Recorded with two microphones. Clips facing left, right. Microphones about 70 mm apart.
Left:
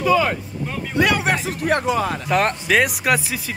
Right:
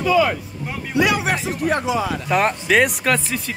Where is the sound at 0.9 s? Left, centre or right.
Left.